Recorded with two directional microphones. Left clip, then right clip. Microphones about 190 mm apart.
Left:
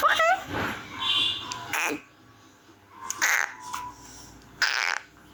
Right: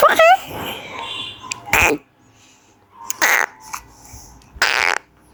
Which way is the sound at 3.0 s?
60° right (ahead or behind).